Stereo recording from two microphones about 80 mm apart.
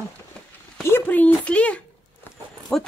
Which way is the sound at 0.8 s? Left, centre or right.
Left.